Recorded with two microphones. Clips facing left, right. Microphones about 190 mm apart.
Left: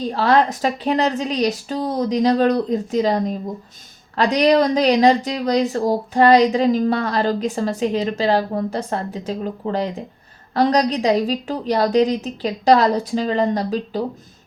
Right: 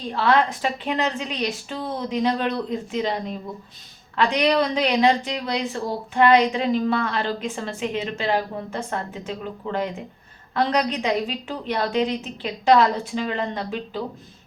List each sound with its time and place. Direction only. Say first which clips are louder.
0.1 s a woman's voice: left 2 dB; 40° left (ahead or behind)